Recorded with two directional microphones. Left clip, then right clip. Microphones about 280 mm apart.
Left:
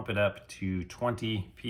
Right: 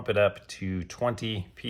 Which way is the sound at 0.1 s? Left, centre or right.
Right.